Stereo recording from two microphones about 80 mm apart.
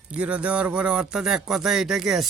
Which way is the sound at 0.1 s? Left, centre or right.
Centre.